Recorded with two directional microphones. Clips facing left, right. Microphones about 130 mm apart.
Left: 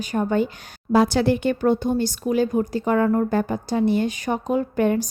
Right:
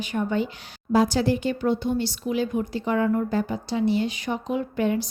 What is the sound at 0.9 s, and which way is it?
Speech, 65° left (ahead or behind).